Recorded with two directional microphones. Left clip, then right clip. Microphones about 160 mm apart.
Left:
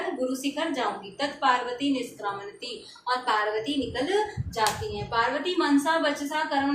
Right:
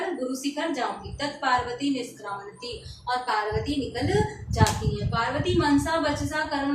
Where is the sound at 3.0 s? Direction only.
20° left (ahead or behind).